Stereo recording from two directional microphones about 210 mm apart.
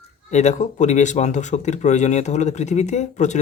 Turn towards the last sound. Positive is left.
turn(degrees=35)  # may be behind; listen again after turning